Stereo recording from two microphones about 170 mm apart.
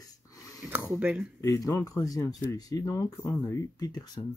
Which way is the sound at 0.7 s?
10° right (ahead or behind).